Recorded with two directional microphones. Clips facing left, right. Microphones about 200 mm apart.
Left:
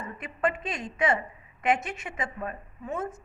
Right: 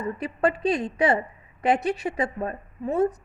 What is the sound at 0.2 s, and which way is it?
A woman's voice, 35° right (ahead or behind).